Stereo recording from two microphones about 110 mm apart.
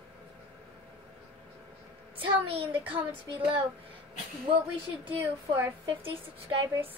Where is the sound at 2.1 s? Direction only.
60° right (ahead or behind).